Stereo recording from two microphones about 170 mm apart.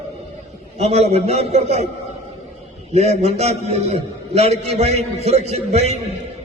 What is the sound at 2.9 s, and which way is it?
A man's voice, 40° right (ahead or behind).